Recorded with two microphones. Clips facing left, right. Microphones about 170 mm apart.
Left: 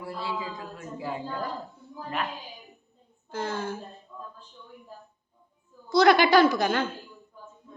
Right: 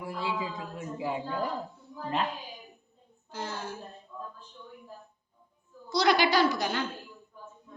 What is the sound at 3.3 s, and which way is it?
Speech, 55° left (ahead or behind).